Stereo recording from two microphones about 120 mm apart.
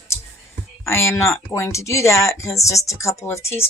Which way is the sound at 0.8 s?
25° left (ahead or behind).